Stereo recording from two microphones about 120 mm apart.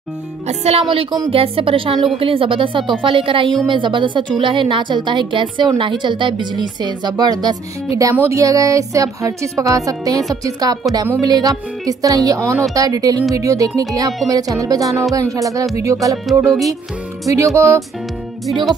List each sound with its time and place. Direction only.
0.5 s a woman's voice: 60° right (ahead or behind); by 7.5 s 35° right (ahead or behind)
8.1 s a woman's voice: 20° right (ahead or behind)
17.3 s a woman's voice: 25° right (ahead or behind)